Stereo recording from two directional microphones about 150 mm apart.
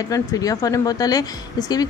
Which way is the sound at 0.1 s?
25° left (ahead or behind).